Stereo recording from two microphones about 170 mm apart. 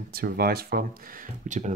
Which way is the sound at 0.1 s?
65° right (ahead or behind).